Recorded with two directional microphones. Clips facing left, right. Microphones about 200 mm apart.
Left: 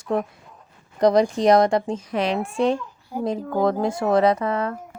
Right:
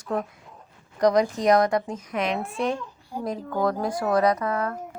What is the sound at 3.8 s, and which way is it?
Speech, 25° left (ahead or behind).